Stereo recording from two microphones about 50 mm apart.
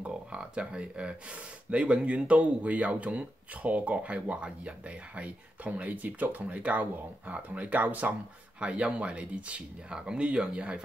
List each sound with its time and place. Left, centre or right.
0.1 s speech: centre
8.5 s speech: right